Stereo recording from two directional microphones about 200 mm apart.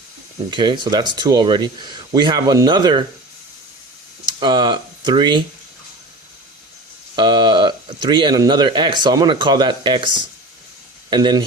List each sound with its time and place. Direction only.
0.5 s speech: 25° right (ahead or behind)
4.4 s speech: 20° right (ahead or behind)
7.2 s speech: 25° right (ahead or behind)
11.1 s speech: 20° right (ahead or behind)